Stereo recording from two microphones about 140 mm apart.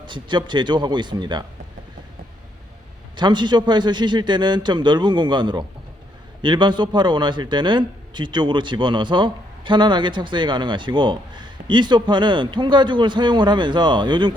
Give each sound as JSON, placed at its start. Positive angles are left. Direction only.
{"t": 0.0, "sound": "a man's voice", "side_deg": -35}
{"t": 3.2, "sound": "a man's voice", "side_deg": -35}